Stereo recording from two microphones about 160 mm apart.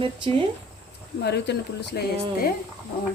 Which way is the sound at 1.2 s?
90° left.